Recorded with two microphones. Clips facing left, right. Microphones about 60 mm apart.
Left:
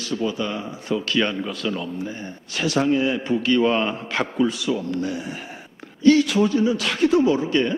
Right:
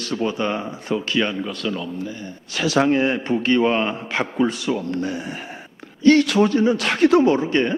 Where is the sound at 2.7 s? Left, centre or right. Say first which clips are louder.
Right 2 dB; right.